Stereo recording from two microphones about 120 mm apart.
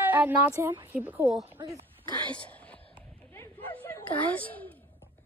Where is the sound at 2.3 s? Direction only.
10° left (ahead or behind).